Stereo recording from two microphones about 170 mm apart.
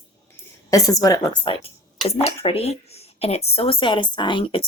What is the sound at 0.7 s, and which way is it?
Speech, 20° left (ahead or behind).